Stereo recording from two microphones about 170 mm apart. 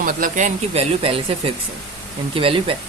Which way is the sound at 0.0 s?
55° right (ahead or behind).